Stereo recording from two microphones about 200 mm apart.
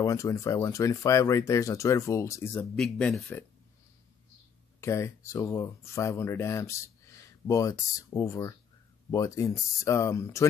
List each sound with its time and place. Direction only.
0.0 s speech: 15° left (ahead or behind)
4.7 s speech: 15° left (ahead or behind)